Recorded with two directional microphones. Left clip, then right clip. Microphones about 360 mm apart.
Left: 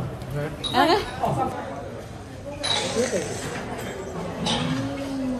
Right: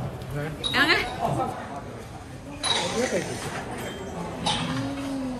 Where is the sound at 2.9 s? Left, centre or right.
Centre.